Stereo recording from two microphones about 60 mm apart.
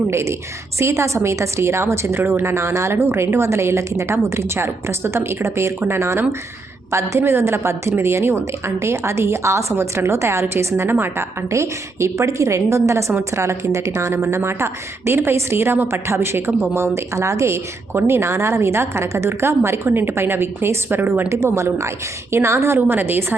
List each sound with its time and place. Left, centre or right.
0.1 s speech: right
21.2 s speech: right
23.0 s a woman's voice: right